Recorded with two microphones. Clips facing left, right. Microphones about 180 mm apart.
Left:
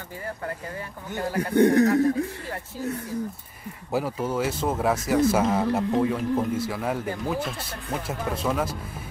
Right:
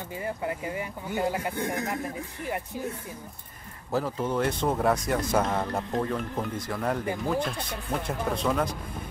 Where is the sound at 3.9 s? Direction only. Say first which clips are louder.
Left 1 dB; 10° left (ahead or behind).